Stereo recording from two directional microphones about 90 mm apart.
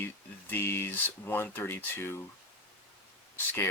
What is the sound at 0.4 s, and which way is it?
Speech, 25° left (ahead or behind).